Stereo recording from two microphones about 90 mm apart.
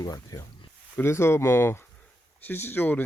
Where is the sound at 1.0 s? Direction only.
25° left (ahead or behind).